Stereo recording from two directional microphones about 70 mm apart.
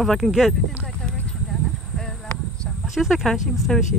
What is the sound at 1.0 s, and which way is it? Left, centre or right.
Horse, centre.